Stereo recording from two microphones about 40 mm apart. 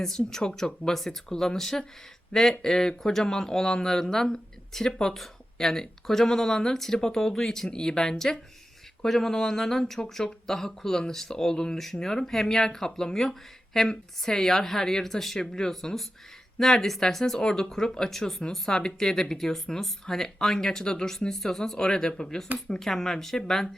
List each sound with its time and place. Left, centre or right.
0.0 s speech: centre